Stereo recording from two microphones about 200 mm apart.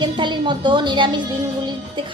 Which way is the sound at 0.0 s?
25° right (ahead or behind).